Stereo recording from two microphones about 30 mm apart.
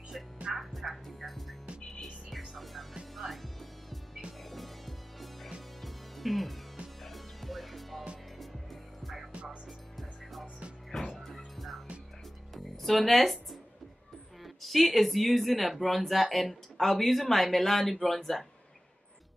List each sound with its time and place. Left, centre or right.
0.6 s music: centre
4.5 s music: centre
9.0 s music: centre
9.3 s music: right
10.9 s music: centre
11.2 s music: centre
14.4 s speech: centre